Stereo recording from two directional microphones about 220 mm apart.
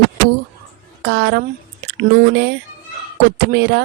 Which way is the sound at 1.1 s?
50° right (ahead or behind).